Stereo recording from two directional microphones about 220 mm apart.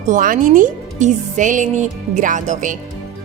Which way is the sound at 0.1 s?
35° right (ahead or behind).